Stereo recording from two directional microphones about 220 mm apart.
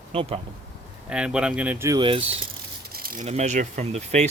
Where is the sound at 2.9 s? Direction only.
40° right (ahead or behind).